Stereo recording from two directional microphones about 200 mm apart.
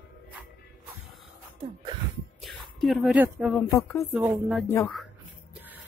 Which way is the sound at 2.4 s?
Centre (ahead or behind).